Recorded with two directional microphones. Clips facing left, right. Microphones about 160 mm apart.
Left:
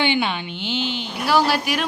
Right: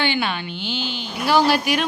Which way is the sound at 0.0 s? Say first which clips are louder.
Left 2 dB; 20° left (ahead or behind).